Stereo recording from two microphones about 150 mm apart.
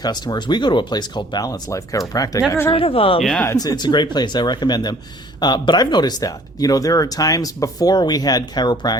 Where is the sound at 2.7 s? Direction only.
40° left (ahead or behind).